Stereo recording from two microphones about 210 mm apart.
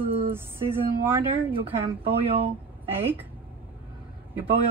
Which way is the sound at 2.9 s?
10° right (ahead or behind).